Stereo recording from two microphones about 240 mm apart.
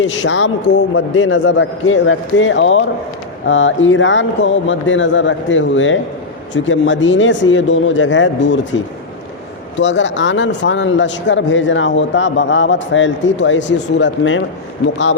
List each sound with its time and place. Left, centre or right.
0.0 s speech: left
9.7 s speech: left